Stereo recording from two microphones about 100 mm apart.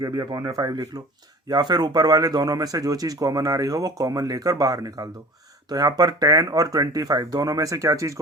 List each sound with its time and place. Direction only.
0.0 s speech: 40° right (ahead or behind)